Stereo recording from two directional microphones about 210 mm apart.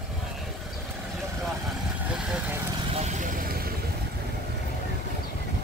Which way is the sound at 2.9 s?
30° right (ahead or behind).